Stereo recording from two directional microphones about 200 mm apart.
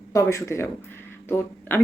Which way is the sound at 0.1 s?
15° left (ahead or behind).